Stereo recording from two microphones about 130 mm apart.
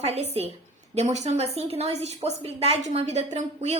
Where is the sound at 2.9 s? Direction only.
65° right (ahead or behind).